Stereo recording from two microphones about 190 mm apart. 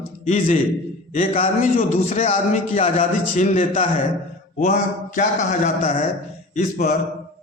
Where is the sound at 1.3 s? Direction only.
30° left (ahead or behind).